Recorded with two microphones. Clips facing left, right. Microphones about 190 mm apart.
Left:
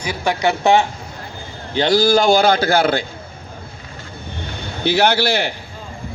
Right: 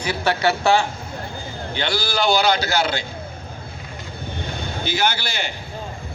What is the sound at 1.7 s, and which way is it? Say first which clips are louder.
Speech: left 10 dB; 40° left (ahead or behind).